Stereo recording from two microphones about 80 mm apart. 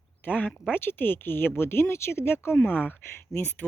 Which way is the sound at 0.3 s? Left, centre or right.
Left.